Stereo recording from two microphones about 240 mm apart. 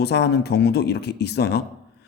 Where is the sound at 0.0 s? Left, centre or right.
Left.